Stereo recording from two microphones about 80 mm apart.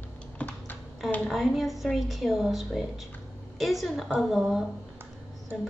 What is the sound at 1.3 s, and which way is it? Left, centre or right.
A woman's voice, centre.